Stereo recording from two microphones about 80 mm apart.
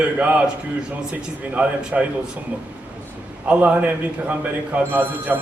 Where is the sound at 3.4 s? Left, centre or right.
Centre.